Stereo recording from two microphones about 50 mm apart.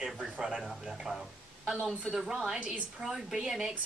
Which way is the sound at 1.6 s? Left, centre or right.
Centre.